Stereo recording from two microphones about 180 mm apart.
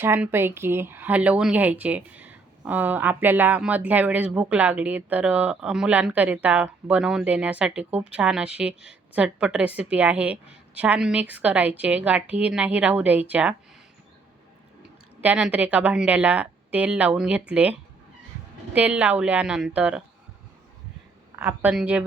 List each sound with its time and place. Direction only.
0.0 s speech: 10° right (ahead or behind)
15.2 s speech: 10° right (ahead or behind)
21.3 s speech: 10° right (ahead or behind)